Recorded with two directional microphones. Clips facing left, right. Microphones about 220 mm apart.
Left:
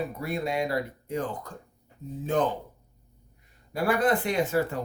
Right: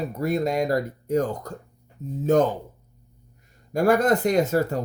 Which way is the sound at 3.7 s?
45° right (ahead or behind).